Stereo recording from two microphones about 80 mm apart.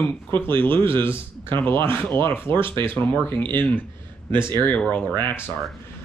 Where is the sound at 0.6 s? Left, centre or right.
Left.